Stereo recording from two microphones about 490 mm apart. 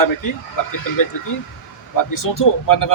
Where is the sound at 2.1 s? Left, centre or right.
Left.